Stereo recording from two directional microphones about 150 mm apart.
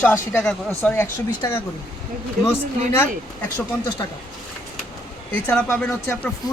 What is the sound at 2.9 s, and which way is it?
Speech, 15° left (ahead or behind).